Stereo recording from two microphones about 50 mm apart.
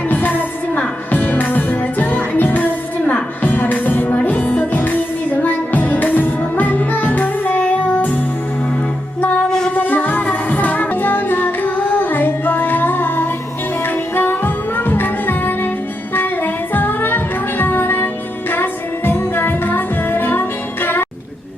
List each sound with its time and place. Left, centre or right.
0.1 s music: left
4.7 s music: left
9.5 s music: centre
9.7 s music: left